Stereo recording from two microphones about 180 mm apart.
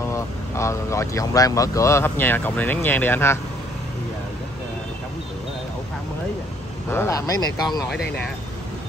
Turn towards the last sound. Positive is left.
turn(degrees=20)  # may be behind; listen again after turning